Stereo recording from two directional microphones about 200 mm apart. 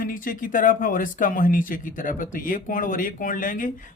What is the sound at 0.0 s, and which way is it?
Speech, 45° left (ahead or behind).